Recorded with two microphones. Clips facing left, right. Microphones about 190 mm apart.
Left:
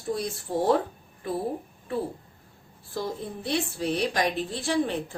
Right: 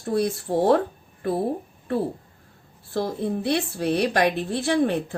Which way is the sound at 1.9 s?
65° right (ahead or behind).